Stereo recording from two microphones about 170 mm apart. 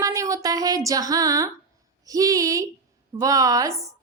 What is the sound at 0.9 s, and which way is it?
A woman's voice, 20° right (ahead or behind).